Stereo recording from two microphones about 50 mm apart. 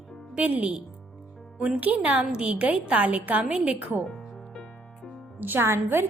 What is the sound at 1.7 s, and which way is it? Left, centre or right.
Speech, right.